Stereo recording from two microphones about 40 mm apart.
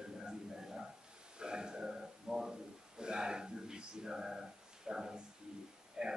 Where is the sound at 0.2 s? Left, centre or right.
Centre.